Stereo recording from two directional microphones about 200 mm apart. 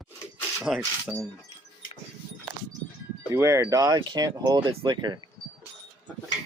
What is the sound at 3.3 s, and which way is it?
Speech, 15° right (ahead or behind).